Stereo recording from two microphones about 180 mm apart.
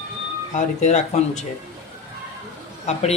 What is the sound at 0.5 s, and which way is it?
Speech, 40° left (ahead or behind).